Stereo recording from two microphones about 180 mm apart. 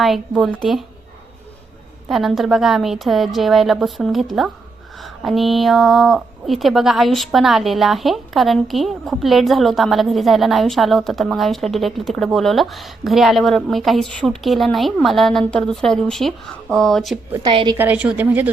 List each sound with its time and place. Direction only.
0.0 s a woman's voice: centre (ahead or behind)
2.0 s a woman's voice: centre (ahead or behind)
17.5 s a woman's voice: 30° right (ahead or behind)
17.7 s a woman's voice: 10° right (ahead or behind)